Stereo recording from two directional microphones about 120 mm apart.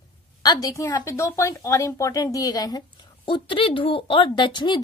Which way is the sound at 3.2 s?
45° left (ahead or behind).